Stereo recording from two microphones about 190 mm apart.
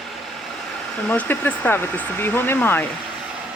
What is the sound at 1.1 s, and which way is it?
Speech, 10° left (ahead or behind).